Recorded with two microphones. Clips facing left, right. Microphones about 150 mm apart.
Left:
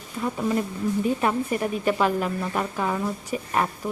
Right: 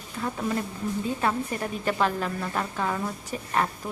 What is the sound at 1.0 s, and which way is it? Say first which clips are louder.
A woman's voice: left 2 dB; 15° left (ahead or behind).